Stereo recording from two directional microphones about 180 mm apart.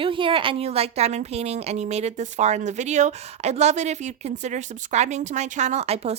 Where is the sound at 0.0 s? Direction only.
30° right (ahead or behind).